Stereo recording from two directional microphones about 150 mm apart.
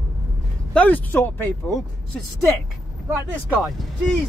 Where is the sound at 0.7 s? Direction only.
10° left (ahead or behind).